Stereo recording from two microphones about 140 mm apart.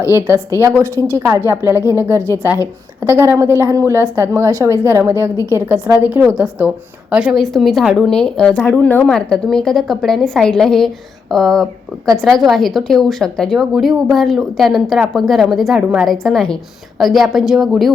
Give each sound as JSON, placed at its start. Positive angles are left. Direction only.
{"t": 0.6, "sound": "speech", "side_deg": 20}
{"t": 1.0, "sound": "a woman's voice", "side_deg": -20}
{"t": 2.2, "sound": "speech", "side_deg": 20}
{"t": 3.0, "sound": "a woman's voice", "side_deg": -20}